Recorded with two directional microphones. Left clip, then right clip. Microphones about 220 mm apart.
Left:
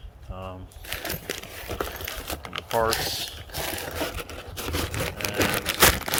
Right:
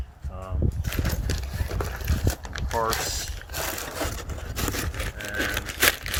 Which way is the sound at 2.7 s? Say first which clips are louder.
Left 2 dB; 15° left (ahead or behind).